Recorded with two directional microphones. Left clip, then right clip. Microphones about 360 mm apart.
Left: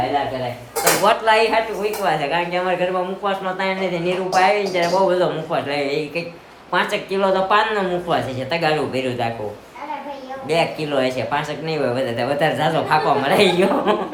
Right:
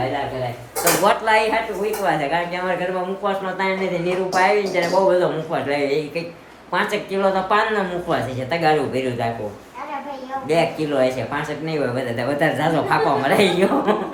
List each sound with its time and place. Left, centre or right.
1.0 s speech: centre
10.5 s speech: centre